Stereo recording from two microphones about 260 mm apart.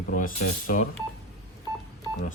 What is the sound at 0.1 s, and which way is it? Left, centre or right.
Speech, left.